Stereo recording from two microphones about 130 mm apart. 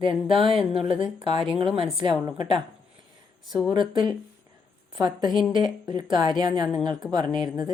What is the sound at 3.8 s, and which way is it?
A woman's voice, 35° right (ahead or behind).